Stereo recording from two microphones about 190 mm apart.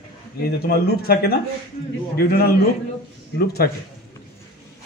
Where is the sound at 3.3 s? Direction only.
55° left (ahead or behind).